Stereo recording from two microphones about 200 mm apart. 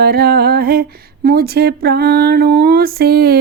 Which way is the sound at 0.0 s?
50° right (ahead or behind).